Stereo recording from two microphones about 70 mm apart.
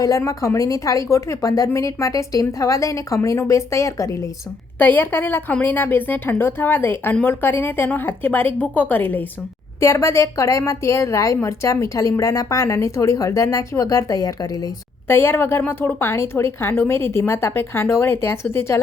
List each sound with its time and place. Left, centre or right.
0.0 s a woman's voice: left
4.8 s a woman's voice: left
9.8 s a woman's voice: left
15.0 s a woman's voice: left